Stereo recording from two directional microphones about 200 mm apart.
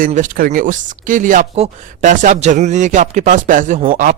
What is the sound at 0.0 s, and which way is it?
Speech, 40° right (ahead or behind).